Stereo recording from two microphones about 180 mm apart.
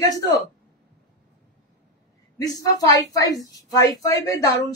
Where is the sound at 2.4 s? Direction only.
20° left (ahead or behind).